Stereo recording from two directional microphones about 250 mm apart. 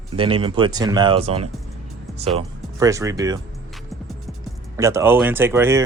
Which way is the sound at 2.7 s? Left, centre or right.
Centre.